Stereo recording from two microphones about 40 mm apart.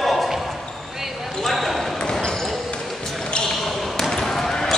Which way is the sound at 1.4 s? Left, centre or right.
Centre.